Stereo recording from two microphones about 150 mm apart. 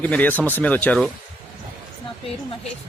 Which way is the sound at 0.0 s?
10° left (ahead or behind).